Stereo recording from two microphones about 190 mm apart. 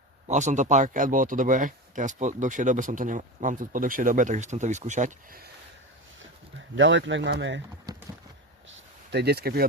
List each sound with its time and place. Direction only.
0.3 s speech: 40° right (ahead or behind)
6.7 s speech: 75° right (ahead or behind)
9.0 s speech: 60° right (ahead or behind)